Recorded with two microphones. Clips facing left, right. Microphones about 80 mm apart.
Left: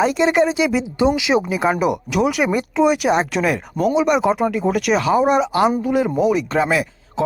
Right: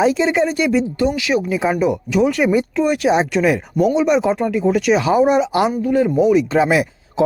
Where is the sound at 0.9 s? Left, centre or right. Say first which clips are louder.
Left 1 dB; centre.